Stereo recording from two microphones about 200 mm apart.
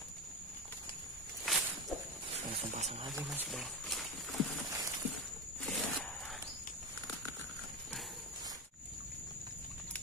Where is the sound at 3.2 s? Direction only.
Centre (ahead or behind).